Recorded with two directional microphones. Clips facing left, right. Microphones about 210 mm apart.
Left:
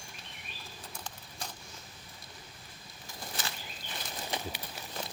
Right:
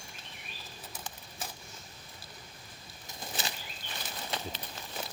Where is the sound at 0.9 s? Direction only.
5° right (ahead or behind).